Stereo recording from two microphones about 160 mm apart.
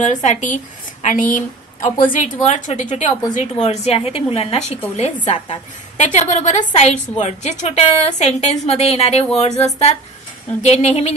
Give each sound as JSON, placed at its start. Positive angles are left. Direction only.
{"t": 0.0, "sound": "a woman's voice", "side_deg": 50}